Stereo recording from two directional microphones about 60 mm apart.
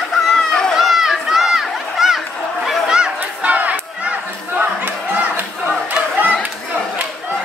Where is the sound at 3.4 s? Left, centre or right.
Right.